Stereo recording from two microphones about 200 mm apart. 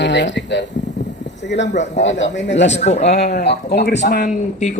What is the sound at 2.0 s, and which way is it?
Speech, 65° left (ahead or behind).